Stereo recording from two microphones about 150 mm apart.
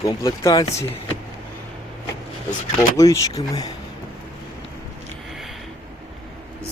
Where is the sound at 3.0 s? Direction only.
25° left (ahead or behind).